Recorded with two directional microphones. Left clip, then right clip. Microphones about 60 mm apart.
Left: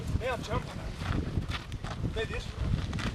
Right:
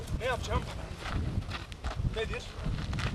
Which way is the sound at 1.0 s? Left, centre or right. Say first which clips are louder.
Left 3 dB; centre.